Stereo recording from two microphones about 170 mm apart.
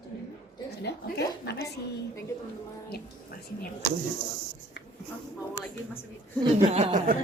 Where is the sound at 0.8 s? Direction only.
70° left (ahead or behind).